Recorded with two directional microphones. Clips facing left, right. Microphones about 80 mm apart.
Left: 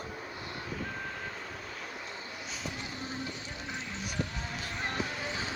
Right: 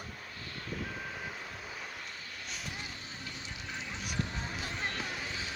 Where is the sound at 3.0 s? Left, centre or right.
Left.